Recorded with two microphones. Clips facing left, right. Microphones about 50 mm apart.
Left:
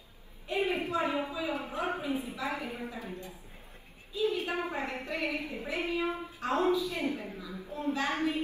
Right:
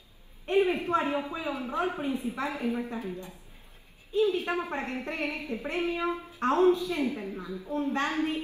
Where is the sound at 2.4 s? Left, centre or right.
Left.